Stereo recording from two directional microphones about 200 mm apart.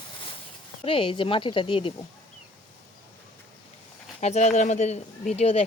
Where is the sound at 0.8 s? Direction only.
25° left (ahead or behind).